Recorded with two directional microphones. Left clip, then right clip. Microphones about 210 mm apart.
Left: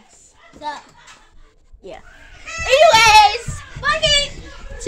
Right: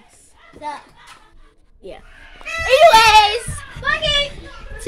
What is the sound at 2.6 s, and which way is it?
A child's voice, 10° right (ahead or behind).